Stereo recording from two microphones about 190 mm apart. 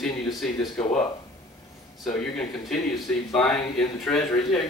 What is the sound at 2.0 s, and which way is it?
Speech, 5° left (ahead or behind).